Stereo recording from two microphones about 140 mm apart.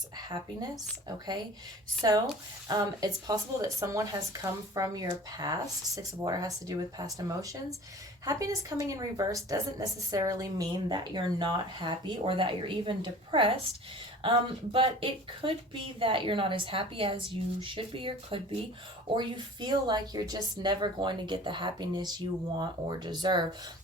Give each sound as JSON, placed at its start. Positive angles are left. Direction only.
{"t": 0.2, "sound": "a woman's voice", "side_deg": -30}